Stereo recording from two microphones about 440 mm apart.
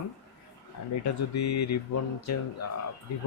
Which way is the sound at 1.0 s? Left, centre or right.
Left.